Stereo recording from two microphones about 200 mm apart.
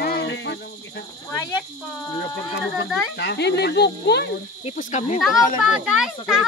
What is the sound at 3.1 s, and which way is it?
Speech, 55° left (ahead or behind).